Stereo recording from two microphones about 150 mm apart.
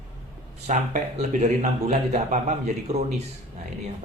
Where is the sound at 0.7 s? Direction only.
55° right (ahead or behind).